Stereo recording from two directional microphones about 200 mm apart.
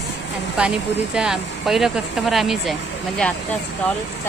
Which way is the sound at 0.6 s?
5° right (ahead or behind).